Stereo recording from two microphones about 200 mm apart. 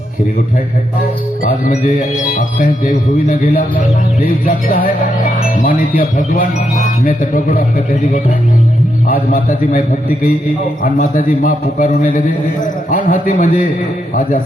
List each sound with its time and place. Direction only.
1.5 s speech: 45° left (ahead or behind)
10.8 s a man's voice: 40° left (ahead or behind)